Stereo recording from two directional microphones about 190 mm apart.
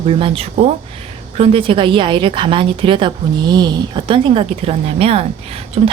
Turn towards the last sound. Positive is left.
turn(degrees=-35)  # may be behind; listen again after turning